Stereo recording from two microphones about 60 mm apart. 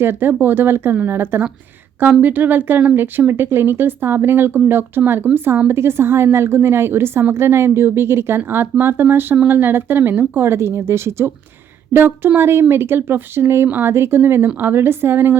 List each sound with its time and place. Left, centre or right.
0.0 s a woman's voice: right